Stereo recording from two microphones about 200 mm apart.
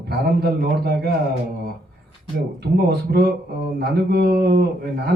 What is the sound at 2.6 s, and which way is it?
Speech, 55° right (ahead or behind).